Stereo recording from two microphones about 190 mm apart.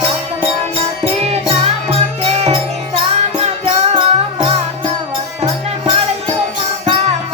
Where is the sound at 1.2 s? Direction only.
30° right (ahead or behind).